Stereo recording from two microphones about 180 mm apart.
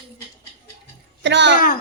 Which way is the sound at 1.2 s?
75° right (ahead or behind).